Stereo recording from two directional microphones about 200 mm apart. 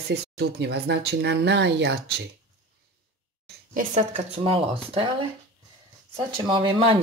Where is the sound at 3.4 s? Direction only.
45° right (ahead or behind).